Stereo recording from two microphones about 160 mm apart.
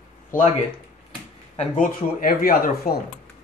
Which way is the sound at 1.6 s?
60° left (ahead or behind).